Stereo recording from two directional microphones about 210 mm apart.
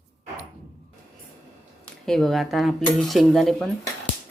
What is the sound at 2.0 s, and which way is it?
Cutlery, centre (ahead or behind).